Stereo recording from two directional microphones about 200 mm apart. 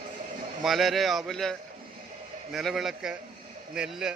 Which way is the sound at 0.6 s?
Centre (ahead or behind).